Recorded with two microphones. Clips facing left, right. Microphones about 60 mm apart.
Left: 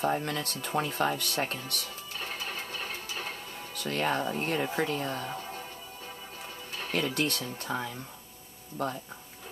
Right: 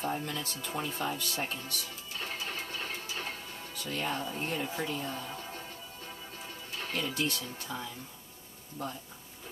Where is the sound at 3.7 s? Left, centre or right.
Left.